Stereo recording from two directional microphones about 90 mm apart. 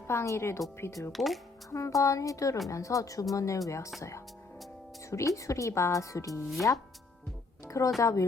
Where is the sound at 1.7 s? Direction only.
35° left (ahead or behind).